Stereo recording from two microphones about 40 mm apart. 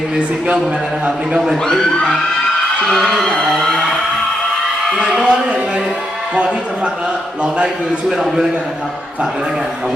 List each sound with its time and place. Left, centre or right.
1.6 s a man's voice: centre
5.2 s speech: right